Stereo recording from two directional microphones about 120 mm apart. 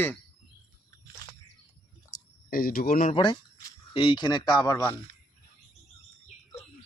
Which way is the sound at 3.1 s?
45° left (ahead or behind).